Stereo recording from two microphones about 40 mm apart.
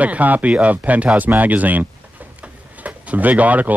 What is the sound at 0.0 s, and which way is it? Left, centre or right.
Speech, right.